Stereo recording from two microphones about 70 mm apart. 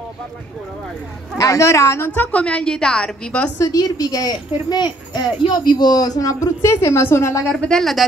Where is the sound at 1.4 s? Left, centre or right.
Left.